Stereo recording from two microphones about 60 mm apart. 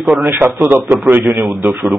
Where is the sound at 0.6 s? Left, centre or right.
Right.